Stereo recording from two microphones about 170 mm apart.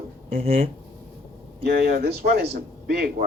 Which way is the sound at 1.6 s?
65° right (ahead or behind).